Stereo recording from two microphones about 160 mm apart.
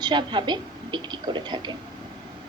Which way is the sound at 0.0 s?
30° right (ahead or behind).